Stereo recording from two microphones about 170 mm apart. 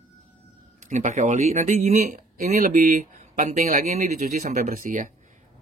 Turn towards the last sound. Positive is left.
turn(degrees=-50)  # may be behind; listen again after turning